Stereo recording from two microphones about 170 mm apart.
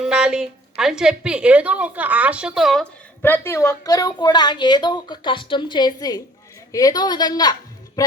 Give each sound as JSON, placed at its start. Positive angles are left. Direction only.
{"t": 0.0, "sound": "a woman's voice", "side_deg": -5}
{"t": 3.2, "sound": "a woman's voice", "side_deg": 15}